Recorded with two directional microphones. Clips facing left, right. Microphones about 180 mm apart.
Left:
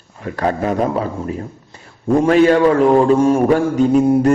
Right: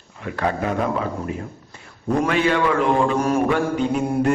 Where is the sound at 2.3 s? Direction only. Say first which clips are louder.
Left 10 dB; 40° left (ahead or behind).